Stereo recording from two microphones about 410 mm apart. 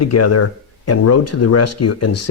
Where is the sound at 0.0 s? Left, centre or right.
Left.